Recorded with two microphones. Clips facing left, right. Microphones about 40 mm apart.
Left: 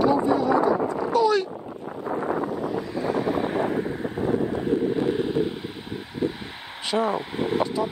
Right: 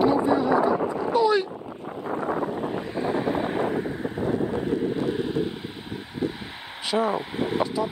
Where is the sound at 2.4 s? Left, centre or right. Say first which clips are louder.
Left 1 dB; right.